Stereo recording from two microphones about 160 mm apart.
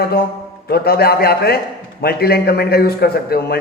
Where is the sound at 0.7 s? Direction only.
75° left (ahead or behind).